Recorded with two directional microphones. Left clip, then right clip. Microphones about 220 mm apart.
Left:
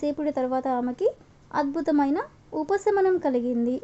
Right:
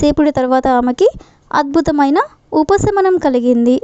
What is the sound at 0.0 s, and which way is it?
A woman's voice, 45° right (ahead or behind).